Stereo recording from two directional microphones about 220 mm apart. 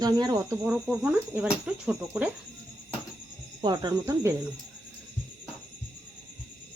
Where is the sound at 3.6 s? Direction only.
20° right (ahead or behind).